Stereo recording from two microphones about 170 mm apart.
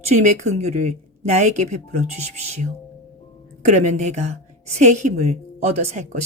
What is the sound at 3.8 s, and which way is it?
A woman's voice, 45° right (ahead or behind).